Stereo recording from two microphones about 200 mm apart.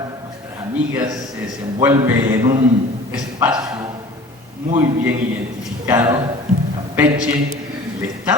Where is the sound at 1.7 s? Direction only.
15° right (ahead or behind).